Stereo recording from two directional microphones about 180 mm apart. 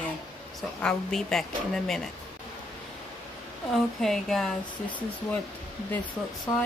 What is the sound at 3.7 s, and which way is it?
Speech, centre (ahead or behind).